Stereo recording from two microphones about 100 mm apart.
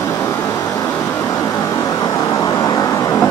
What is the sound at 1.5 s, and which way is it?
Vehicle, 35° left (ahead or behind).